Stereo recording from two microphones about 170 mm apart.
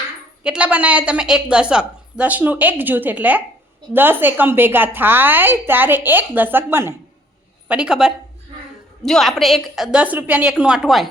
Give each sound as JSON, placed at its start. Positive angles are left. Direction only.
{"t": 0.4, "sound": "a woman's voice", "side_deg": -5}